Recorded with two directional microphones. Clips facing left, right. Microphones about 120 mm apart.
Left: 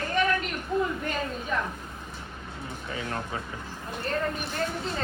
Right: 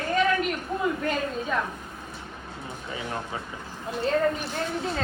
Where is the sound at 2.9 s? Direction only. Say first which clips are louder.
Even; 15° right (ahead or behind).